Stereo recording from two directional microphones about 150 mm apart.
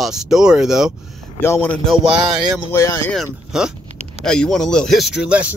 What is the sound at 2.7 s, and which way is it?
Speech, 20° left (ahead or behind).